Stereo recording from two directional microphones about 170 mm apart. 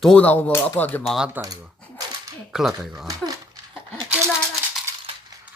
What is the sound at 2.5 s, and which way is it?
Speech, centre (ahead or behind).